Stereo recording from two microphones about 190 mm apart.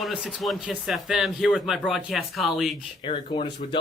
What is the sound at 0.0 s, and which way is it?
Speech, 5° right (ahead or behind).